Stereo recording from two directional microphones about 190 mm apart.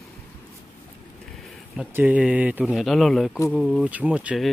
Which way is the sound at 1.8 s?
5° right (ahead or behind).